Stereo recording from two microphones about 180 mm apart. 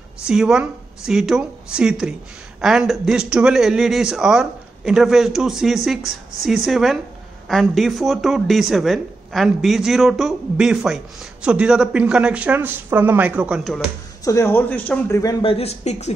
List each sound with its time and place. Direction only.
0.2 s speech: 5° right (ahead or behind)
14.2 s speech: 15° left (ahead or behind)
15.4 s speech: 35° left (ahead or behind)